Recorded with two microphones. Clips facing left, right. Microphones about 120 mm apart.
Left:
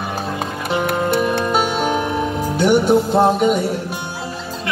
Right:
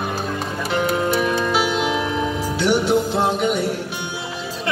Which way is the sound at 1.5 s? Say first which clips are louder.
Left 2 dB; 45° left (ahead or behind).